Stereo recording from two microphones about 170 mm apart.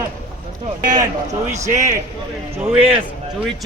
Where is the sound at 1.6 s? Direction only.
20° right (ahead or behind).